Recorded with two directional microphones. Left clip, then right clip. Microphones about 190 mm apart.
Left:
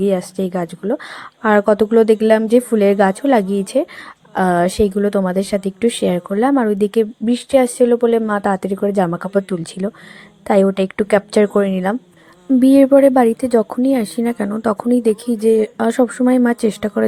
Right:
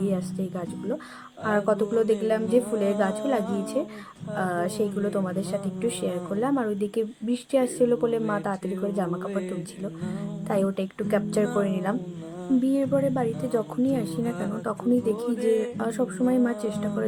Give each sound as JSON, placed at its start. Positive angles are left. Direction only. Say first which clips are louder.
{"t": 0.0, "sound": "a woman's voice", "louder": "left 12 dB", "side_deg": 40}